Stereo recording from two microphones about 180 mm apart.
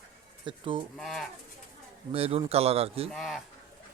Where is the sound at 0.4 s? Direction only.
25° right (ahead or behind).